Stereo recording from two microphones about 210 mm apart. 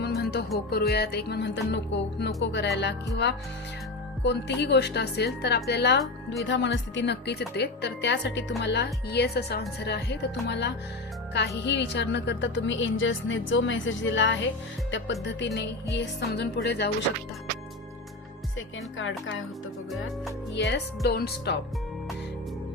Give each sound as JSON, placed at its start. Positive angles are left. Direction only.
{"t": 0.0, "sound": "music", "side_deg": 50}
{"t": 0.7, "sound": "a woman's voice", "side_deg": 50}
{"t": 18.9, "sound": "a woman's voice", "side_deg": 65}
{"t": 20.6, "sound": "speech", "side_deg": 55}